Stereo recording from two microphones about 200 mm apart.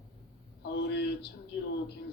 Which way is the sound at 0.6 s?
55° left (ahead or behind).